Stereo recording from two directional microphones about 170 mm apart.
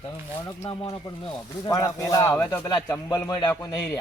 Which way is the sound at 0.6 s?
25° left (ahead or behind).